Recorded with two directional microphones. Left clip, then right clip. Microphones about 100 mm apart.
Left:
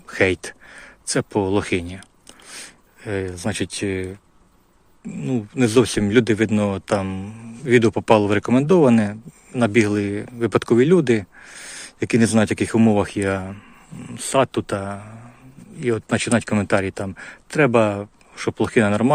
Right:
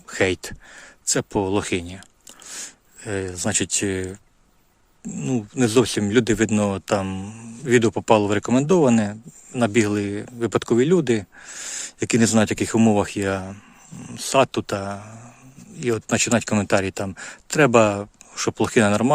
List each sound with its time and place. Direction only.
0.1 s speech: 35° right (ahead or behind); by 5.5 s 60° right (ahead or behind)
5.5 s speech: 45° right (ahead or behind)
7.9 s speech: 35° right (ahead or behind)
11.3 s speech: 50° right (ahead or behind)